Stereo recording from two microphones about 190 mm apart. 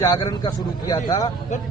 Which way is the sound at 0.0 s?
20° left (ahead or behind).